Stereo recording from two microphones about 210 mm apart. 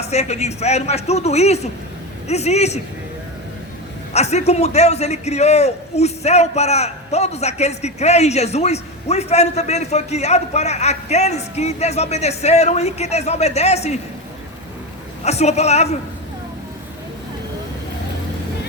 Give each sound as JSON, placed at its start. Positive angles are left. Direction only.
{"t": 0.0, "sound": "a man's voice", "side_deg": 30}
{"t": 4.1, "sound": "a man's voice", "side_deg": 30}
{"t": 15.2, "sound": "a man's voice", "side_deg": 30}